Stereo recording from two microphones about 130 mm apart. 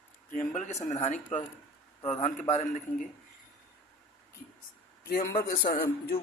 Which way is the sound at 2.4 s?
65° left (ahead or behind).